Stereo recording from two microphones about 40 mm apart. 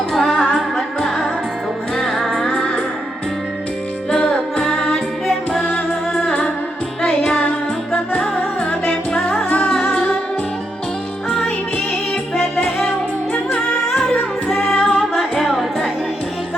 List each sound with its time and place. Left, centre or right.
0.1 s music: centre
2.0 s music: centre
4.2 s music: left
7.0 s music: left
12.3 s music: centre
14.4 s music: centre